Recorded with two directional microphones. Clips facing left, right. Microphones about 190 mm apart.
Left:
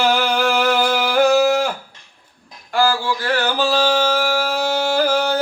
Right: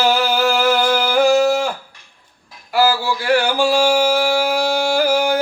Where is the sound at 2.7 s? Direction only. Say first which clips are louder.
Right 2 dB; 5° right (ahead or behind).